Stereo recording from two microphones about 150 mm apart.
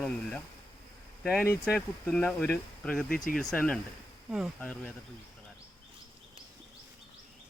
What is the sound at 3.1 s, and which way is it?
Speech, 70° left (ahead or behind).